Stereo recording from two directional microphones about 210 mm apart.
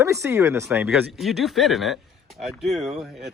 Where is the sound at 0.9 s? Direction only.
Centre (ahead or behind).